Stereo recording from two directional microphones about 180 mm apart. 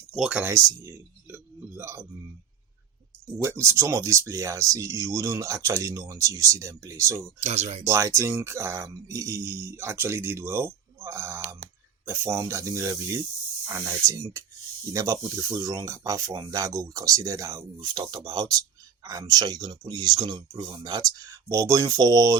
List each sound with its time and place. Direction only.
0.2 s speech: 5° right (ahead or behind)
3.3 s speech: 10° right (ahead or behind)
7.4 s speech: 35° right (ahead or behind)
7.9 s speech: 15° right (ahead or behind)
11.0 s typing: 15° right (ahead or behind)
12.0 s speech: 15° right (ahead or behind)